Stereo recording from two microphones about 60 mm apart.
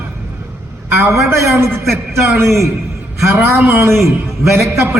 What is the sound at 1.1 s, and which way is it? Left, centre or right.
Speech, right.